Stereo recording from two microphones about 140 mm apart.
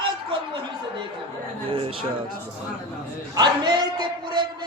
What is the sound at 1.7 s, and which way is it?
Music, 40° right (ahead or behind).